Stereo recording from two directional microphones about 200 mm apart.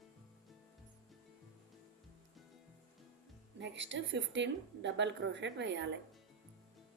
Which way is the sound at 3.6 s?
65° right (ahead or behind).